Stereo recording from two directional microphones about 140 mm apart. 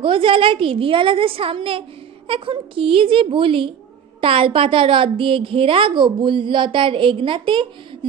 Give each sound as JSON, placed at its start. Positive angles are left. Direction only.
{"t": 0.0, "sound": "a woman's voice", "side_deg": -40}